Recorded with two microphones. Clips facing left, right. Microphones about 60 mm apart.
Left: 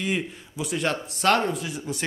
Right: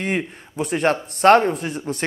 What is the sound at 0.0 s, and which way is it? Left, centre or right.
Speech, right.